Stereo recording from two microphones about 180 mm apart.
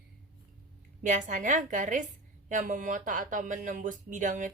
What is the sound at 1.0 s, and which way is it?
A woman's voice, 45° right (ahead or behind).